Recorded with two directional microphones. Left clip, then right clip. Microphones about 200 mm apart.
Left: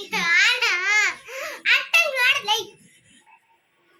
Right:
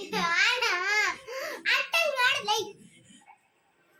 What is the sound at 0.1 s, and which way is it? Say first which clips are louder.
Babbling: left 7 dB; 25° right (ahead or behind).